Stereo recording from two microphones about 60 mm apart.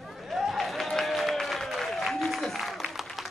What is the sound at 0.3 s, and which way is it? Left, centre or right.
Applause, centre.